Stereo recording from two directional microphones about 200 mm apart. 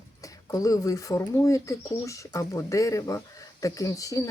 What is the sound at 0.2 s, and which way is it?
Speech, 15° left (ahead or behind).